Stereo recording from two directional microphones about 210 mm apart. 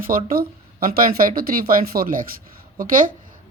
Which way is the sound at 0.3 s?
45° right (ahead or behind).